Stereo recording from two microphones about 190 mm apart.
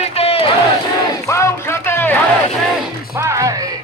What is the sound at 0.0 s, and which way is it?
Battle cry, 30° left (ahead or behind).